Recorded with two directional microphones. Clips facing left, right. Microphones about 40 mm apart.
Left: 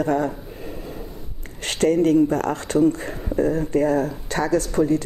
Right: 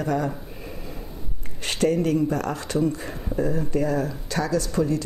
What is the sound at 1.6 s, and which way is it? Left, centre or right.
Speech, left.